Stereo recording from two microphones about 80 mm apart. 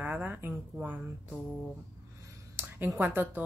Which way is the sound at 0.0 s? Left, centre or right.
Right.